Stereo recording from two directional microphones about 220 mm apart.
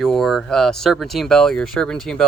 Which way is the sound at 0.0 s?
Centre (ahead or behind).